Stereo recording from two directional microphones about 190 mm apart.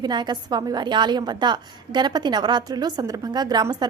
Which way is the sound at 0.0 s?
20° right (ahead or behind).